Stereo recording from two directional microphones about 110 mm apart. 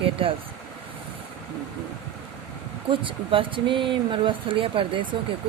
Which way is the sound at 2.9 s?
50° right (ahead or behind).